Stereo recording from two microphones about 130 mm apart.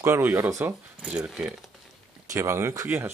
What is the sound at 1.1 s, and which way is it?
Speech, 5° right (ahead or behind).